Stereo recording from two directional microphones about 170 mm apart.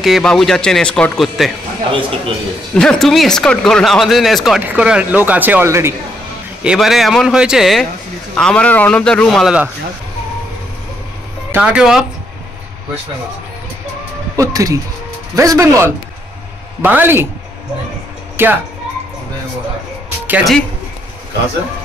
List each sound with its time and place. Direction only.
0.0 s speech: centre (ahead or behind)
1.9 s speech: 30° right (ahead or behind)
2.7 s speech: 5° left (ahead or behind); by 5.9 s 15° right (ahead or behind)
6.6 s speech: 5° right (ahead or behind)
11.5 s speech: 5° right (ahead or behind)
14.3 s speech: 20° right (ahead or behind)
18.3 s music: 10° right (ahead or behind)
20.2 s speech: 10° right (ahead or behind)